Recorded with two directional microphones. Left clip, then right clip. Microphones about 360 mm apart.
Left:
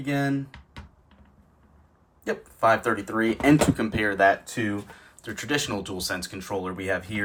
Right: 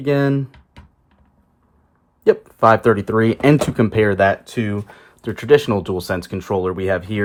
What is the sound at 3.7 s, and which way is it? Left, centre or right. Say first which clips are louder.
Speech: right 8 dB; centre.